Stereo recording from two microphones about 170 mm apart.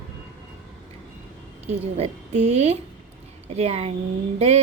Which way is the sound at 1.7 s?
40° right (ahead or behind).